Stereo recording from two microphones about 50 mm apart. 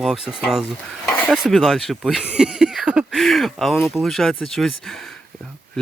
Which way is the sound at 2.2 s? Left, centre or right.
Centre.